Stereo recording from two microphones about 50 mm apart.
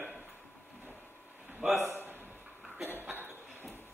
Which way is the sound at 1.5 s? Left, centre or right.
Right.